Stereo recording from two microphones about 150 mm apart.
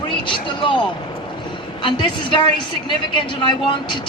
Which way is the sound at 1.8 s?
30° left (ahead or behind).